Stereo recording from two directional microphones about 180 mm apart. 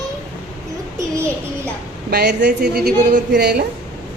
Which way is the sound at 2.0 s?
65° right (ahead or behind).